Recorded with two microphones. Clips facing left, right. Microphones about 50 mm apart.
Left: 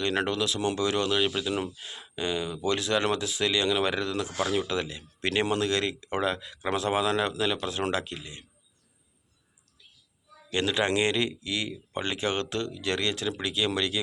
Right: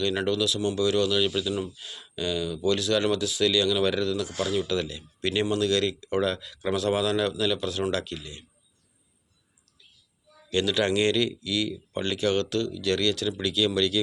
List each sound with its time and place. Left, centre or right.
0.1 s speech: left
1.5 s speech: left
1.7 s speech: left
10.5 s speech: left